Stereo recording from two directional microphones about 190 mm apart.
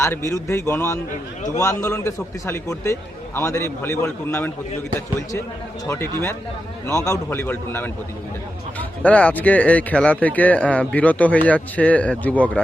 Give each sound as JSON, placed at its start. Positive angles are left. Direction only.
{"t": 0.0, "sound": "speech", "side_deg": 15}
{"t": 5.8, "sound": "speech", "side_deg": 15}
{"t": 9.0, "sound": "speech", "side_deg": 5}